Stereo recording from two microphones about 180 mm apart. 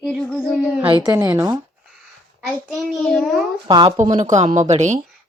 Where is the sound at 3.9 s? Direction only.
40° right (ahead or behind).